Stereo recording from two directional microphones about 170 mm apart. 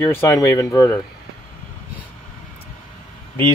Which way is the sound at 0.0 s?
15° left (ahead or behind).